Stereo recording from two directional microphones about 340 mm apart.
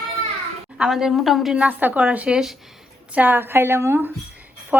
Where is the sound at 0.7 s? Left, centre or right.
Centre.